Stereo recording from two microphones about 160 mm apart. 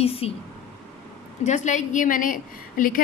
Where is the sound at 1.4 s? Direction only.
50° left (ahead or behind).